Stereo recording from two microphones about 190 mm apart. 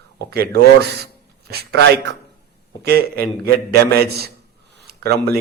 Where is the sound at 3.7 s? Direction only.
55° right (ahead or behind).